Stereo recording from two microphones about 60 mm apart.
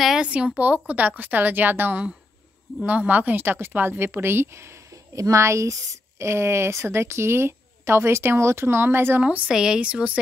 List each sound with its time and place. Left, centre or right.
0.2 s a woman's voice: centre; by 9.2 s right
9.5 s speech: centre